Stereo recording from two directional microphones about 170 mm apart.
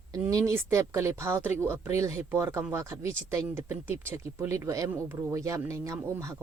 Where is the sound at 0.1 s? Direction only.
20° right (ahead or behind).